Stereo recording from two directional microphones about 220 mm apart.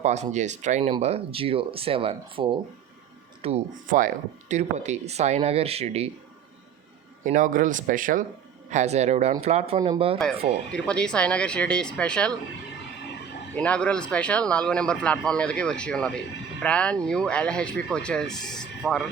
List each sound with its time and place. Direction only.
0.0 s speech: 30° right (ahead or behind)
3.4 s speech: 35° right (ahead or behind)
7.3 s speech: 35° right (ahead or behind)
10.7 s speech: 5° left (ahead or behind)
13.6 s speech: 5° left (ahead or behind)